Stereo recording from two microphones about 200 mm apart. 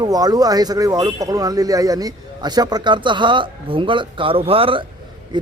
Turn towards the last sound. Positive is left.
turn(degrees=-20)  # may be behind; listen again after turning